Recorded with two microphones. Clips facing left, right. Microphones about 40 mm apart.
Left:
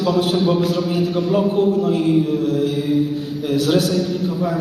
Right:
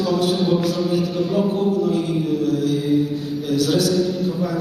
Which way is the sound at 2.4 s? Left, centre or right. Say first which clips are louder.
Left 1 dB; left.